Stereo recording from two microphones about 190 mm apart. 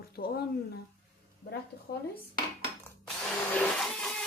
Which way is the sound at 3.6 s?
5° left (ahead or behind).